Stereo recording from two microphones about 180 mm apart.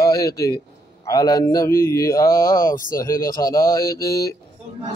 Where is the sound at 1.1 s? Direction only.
20° left (ahead or behind).